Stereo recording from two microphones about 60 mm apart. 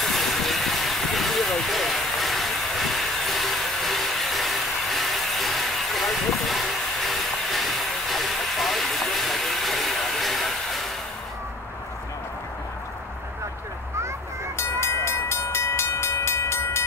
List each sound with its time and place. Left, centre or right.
0.0 s vehicle: centre
14.6 s train: left